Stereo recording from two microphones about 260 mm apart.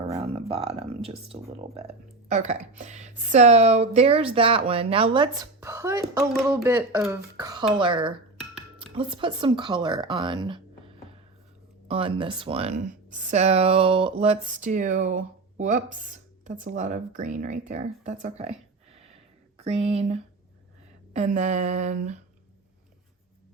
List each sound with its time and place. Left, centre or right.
0.1 s a sound: right
1.3 s speech: right
19.5 s speech: right